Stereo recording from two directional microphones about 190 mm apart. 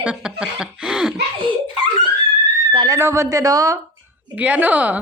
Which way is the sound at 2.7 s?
25° right (ahead or behind).